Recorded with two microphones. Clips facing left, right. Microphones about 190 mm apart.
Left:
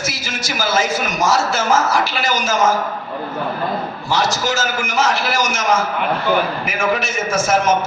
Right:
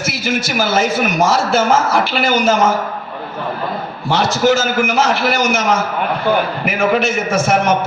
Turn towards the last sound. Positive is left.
turn(degrees=-60)  # may be behind; listen again after turning